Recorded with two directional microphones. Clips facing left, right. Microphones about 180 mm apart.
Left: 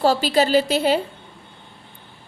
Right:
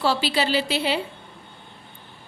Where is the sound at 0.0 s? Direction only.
45° left (ahead or behind).